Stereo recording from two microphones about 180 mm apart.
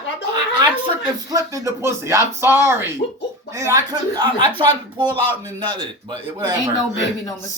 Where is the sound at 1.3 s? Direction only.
20° right (ahead or behind).